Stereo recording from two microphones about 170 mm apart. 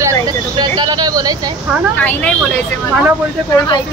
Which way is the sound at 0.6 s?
25° right (ahead or behind).